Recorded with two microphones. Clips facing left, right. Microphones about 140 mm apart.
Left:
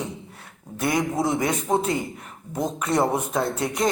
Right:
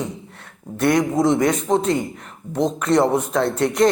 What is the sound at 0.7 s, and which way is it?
Speech, 5° left (ahead or behind).